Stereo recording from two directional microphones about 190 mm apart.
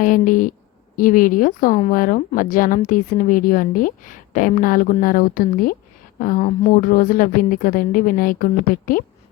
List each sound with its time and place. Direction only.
0.0 s speech: 45° left (ahead or behind)